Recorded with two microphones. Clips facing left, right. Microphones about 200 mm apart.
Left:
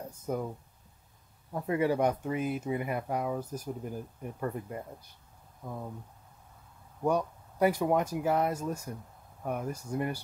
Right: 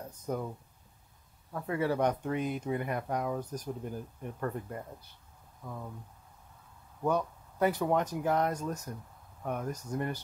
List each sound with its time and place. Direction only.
0.1 s speech: 10° left (ahead or behind)
1.5 s speech: 15° left (ahead or behind)
5.6 s speech: 25° left (ahead or behind)
7.0 s speech: 10° left (ahead or behind)